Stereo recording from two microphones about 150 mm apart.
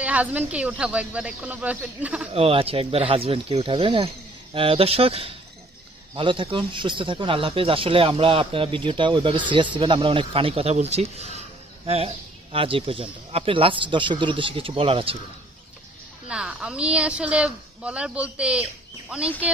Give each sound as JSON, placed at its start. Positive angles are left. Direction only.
{"t": 0.0, "sound": "a woman's voice", "side_deg": -10}
{"t": 2.3, "sound": "speech", "side_deg": -40}
{"t": 16.3, "sound": "a woman's voice", "side_deg": -5}